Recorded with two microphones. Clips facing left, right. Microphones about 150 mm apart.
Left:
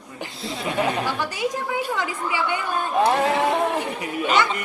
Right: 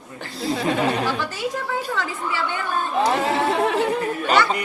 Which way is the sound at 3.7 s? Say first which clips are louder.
Right 5 dB; 15° left (ahead or behind).